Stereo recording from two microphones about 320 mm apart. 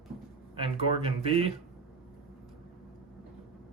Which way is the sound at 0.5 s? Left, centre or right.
Centre.